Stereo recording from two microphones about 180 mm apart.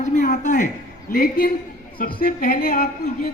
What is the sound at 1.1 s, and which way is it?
A man's voice, 50° left (ahead or behind).